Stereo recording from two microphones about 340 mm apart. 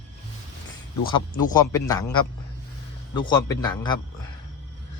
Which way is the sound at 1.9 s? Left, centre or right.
Centre.